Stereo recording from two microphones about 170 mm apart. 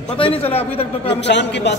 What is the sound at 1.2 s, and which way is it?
Speech, 90° left.